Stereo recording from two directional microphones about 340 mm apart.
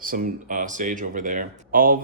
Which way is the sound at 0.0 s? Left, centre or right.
Right.